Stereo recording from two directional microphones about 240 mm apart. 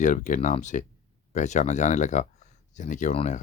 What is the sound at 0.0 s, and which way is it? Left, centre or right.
Speech, left.